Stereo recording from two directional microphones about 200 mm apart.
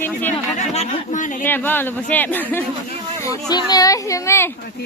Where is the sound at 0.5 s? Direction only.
30° left (ahead or behind).